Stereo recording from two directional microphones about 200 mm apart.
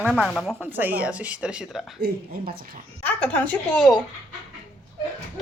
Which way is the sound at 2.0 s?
50° right (ahead or behind).